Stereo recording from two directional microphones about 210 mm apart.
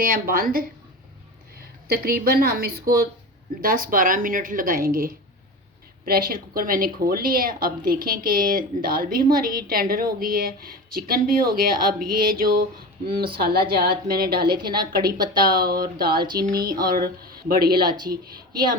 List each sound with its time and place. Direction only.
0.0 s a woman's voice: 45° right (ahead or behind)
1.9 s a woman's voice: 45° right (ahead or behind)
16.1 s speech: 20° right (ahead or behind)
16.6 s a woman's voice: 45° right (ahead or behind)
17.8 s speech: 20° right (ahead or behind)